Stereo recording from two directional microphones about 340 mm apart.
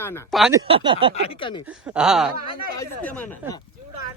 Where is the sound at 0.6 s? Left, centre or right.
Centre.